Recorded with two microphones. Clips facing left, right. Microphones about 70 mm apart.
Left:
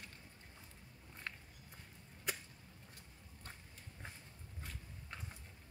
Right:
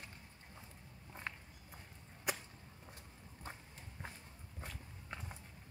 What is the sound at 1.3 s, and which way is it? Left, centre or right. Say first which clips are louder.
Walk: right 2 dB; centre.